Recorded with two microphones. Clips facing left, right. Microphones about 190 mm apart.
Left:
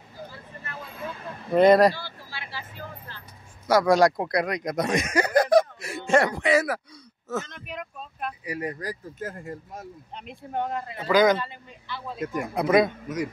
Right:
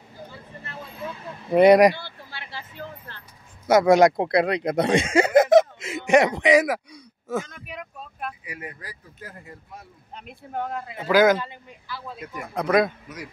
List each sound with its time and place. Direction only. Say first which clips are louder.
1.5 s speech: right 2 dB; 15° right (ahead or behind)
3.6 s speech: right 3 dB; 25° right (ahead or behind); by 8.3 s 5° right (ahead or behind)
8.5 s speech: left 8 dB; 40° left (ahead or behind)
10.1 s speech: left 1 dB; 5° right (ahead or behind)
12.2 s speech: left 8 dB; 45° left (ahead or behind)
12.5 s speech: even; 5° left (ahead or behind)